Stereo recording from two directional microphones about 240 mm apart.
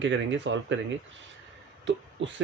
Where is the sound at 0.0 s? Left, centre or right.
Right.